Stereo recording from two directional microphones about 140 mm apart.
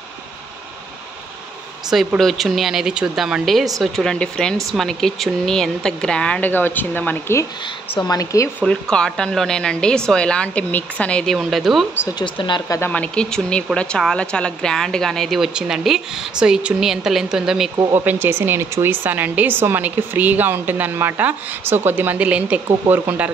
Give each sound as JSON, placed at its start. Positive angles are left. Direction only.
{"t": 1.9, "sound": "speech", "side_deg": 0}
{"t": 8.0, "sound": "speech", "side_deg": 25}
{"t": 8.9, "sound": "speech", "side_deg": 5}
{"t": 12.2, "sound": "speech", "side_deg": 35}
{"t": 12.7, "sound": "speech", "side_deg": 15}
{"t": 17.7, "sound": "speech", "side_deg": -25}